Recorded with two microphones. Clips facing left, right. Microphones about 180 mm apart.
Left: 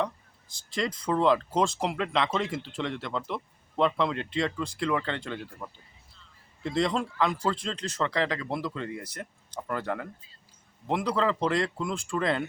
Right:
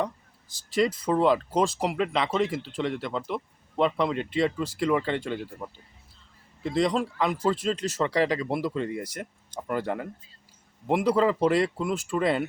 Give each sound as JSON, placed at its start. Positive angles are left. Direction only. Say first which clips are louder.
{"t": 0.7, "sound": "speech", "louder": "right 5 dB", "side_deg": -5}
{"t": 6.6, "sound": "speech", "louder": "right 3 dB", "side_deg": -5}